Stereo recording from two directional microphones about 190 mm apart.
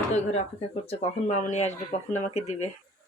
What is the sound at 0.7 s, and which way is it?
Speech, 35° left (ahead or behind).